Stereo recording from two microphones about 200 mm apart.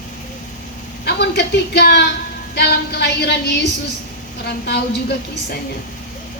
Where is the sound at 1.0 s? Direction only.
55° left (ahead or behind).